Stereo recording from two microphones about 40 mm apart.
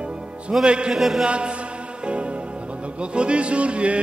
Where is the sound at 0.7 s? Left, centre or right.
Right.